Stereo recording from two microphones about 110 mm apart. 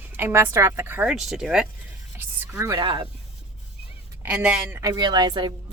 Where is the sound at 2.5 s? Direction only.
25° right (ahead or behind).